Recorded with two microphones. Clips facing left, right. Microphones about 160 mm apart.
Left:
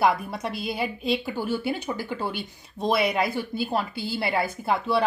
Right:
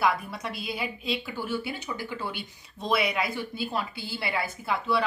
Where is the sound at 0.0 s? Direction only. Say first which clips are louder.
Left 4 dB; 40° left (ahead or behind).